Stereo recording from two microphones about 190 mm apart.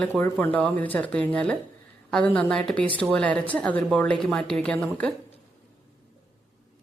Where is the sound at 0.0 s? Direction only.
10° left (ahead or behind).